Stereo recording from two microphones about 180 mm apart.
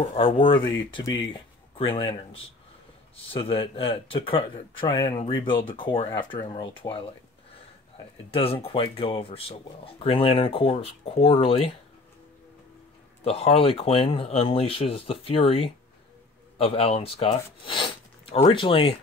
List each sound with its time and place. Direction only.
0.1 s speech: 30° left (ahead or behind)
8.3 s speech: 30° left (ahead or behind)
13.2 s speech: 35° left (ahead or behind)